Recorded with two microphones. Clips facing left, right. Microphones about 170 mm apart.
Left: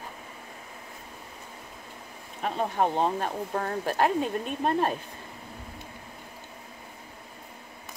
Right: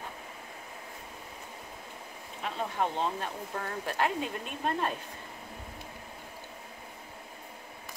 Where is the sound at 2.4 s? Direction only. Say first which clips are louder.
Left 6 dB; 45° left (ahead or behind).